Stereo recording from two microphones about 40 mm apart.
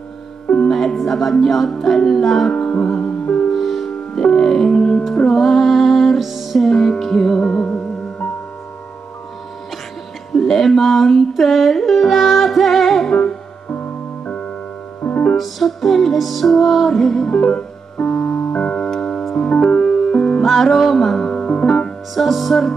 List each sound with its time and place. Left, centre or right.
0.7 s music: centre
5.4 s music: centre
10.3 s music: centre
14.2 s piano: left
15.3 s music: centre
17.3 s music: centre
17.9 s keyboard: left
18.3 s music: left
18.8 s piano: centre
19.5 s music: left
19.8 s music: centre
20.4 s music: centre
21.3 s music: left
22.1 s music: centre